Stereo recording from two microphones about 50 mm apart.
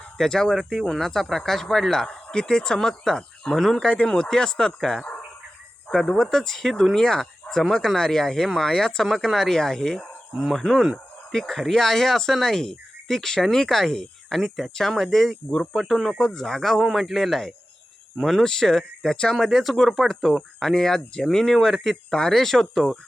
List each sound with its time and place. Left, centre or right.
0.2 s speech: centre
0.5 s speech: centre
3.8 s speech: centre
15.4 s speech: centre
15.8 s speech: centre
19.5 s speech: centre